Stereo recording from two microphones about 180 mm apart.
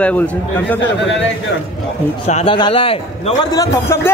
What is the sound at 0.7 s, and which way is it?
Speech, 90° left.